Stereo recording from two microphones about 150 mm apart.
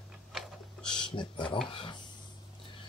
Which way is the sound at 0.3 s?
Centre (ahead or behind).